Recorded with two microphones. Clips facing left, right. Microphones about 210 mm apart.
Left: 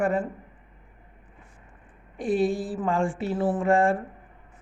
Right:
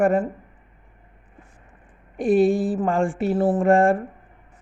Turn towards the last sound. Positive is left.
turn(degrees=-45)  # may be behind; listen again after turning